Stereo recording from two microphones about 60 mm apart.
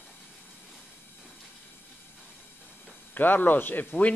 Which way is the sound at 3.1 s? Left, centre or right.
Left.